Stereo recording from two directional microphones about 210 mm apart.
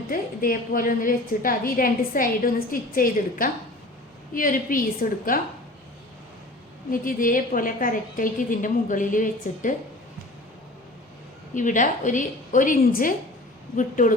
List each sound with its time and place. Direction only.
0.1 s a woman's voice: 40° left (ahead or behind)
6.9 s a woman's voice: 40° left (ahead or behind)
11.5 s a woman's voice: 35° left (ahead or behind)